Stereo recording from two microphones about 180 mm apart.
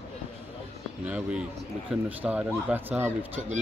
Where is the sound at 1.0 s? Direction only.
5° right (ahead or behind).